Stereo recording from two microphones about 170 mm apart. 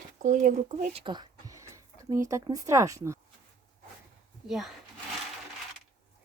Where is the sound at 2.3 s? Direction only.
20° right (ahead or behind).